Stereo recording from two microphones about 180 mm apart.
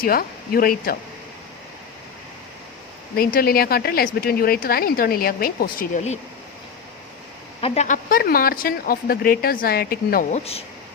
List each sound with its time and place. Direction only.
0.0 s a woman's voice: 55° left (ahead or behind)
3.2 s a woman's voice: 55° left (ahead or behind)
7.6 s speech: 40° left (ahead or behind)
8.1 s a woman's voice: 55° left (ahead or behind)
10.3 s speech: 35° left (ahead or behind)